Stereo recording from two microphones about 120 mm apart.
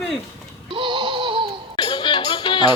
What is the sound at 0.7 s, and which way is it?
Laughter, 40° right (ahead or behind).